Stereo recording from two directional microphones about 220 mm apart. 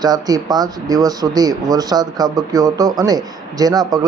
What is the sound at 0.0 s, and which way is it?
Speech, 15° right (ahead or behind).